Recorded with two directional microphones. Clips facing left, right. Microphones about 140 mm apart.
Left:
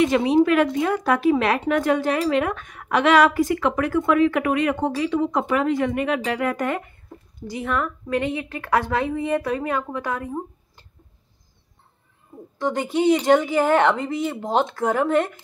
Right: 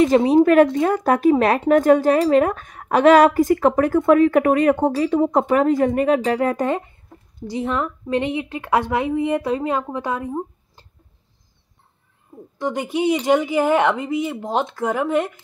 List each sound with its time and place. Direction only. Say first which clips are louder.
0.0 s a woman's voice: right 4 dB; 40° right (ahead or behind); by 10.9 s 20° right (ahead or behind)
12.5 s speech: even; 10° right (ahead or behind)